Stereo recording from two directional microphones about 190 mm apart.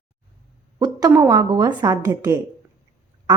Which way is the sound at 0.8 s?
20° right (ahead or behind).